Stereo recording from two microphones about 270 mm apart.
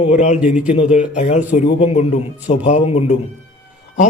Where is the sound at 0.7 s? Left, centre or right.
Left.